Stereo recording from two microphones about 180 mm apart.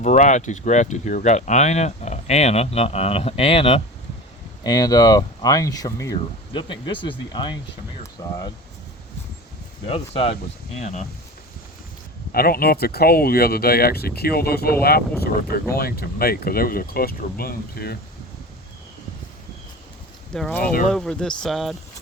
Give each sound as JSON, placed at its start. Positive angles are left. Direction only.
{"t": 0.0, "sound": "speech", "side_deg": 40}
{"t": 4.6, "sound": "speech", "side_deg": 20}
{"t": 9.8, "sound": "speech", "side_deg": 35}
{"t": 12.3, "sound": "speech", "side_deg": 55}
{"t": 20.3, "sound": "speech", "side_deg": 5}